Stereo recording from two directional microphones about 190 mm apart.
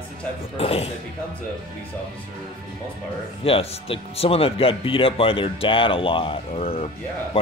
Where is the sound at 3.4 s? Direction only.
30° left (ahead or behind).